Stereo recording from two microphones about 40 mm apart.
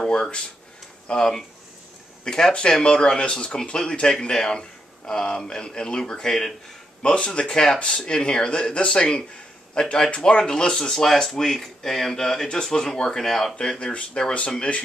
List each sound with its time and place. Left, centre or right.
0.0 s speech: centre